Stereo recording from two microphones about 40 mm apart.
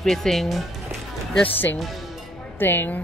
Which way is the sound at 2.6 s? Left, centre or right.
Left.